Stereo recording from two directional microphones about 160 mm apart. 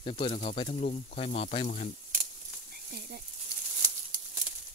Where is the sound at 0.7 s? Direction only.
50° left (ahead or behind).